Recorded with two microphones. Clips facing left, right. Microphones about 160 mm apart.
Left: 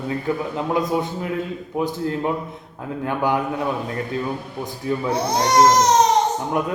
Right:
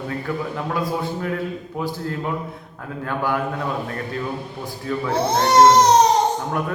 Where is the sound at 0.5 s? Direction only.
20° left (ahead or behind).